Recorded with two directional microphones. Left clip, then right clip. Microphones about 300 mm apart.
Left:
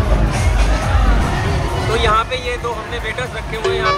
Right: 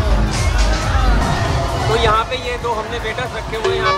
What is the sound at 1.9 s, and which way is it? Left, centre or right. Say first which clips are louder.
Vehicle: even; centre.